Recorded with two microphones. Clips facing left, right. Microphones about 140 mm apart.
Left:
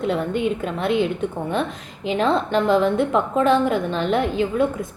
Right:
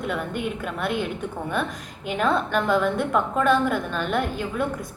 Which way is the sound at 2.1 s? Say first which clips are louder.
Left 3 dB; 25° left (ahead or behind).